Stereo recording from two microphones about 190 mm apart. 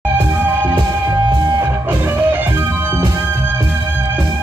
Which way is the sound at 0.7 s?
20° right (ahead or behind).